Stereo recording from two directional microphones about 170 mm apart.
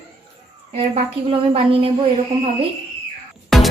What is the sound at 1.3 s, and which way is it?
Speech, 35° right (ahead or behind).